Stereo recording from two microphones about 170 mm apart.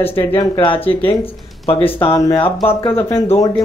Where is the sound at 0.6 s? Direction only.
30° left (ahead or behind).